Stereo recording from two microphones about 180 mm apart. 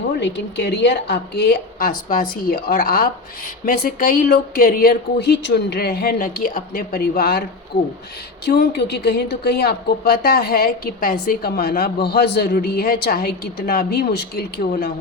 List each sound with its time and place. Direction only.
0.2 s a woman's voice: 75° left (ahead or behind)
8.4 s a woman's voice: 70° left (ahead or behind)